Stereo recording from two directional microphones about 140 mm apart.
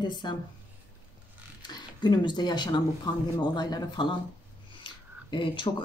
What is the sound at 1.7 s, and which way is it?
Speech, 30° left (ahead or behind).